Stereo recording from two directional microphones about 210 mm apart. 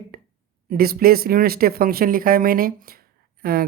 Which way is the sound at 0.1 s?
45° right (ahead or behind).